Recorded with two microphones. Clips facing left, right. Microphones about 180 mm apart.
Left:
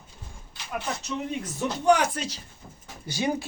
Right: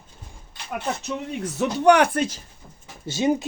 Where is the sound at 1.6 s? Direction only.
70° right (ahead or behind).